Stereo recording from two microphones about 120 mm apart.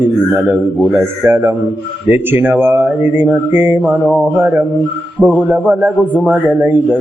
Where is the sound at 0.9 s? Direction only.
20° right (ahead or behind).